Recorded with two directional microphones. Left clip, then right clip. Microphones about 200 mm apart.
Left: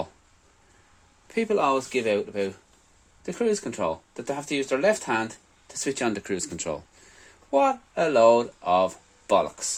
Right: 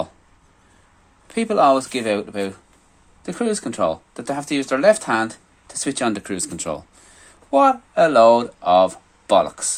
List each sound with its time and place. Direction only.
1.3 s speech: 20° left (ahead or behind)